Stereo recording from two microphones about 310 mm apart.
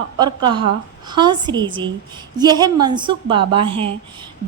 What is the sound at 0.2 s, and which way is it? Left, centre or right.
A woman's voice, centre.